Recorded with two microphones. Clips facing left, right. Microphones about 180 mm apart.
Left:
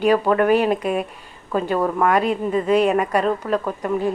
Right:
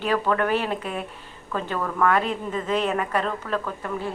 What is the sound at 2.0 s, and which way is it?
A woman's voice, 15° left (ahead or behind).